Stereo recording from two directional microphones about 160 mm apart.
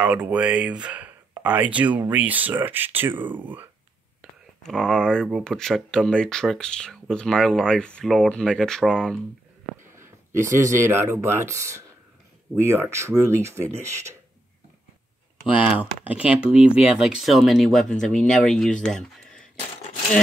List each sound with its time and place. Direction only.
0.0 s speech: 5° right (ahead or behind)
4.2 s speech: 5° left (ahead or behind)
9.9 s a sound: 15° right (ahead or behind)
10.6 s speech: 15° right (ahead or behind)
15.5 s speech: 10° right (ahead or behind)